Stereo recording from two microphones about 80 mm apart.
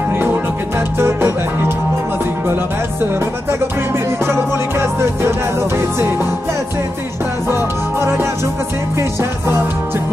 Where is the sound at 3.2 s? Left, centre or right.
Right.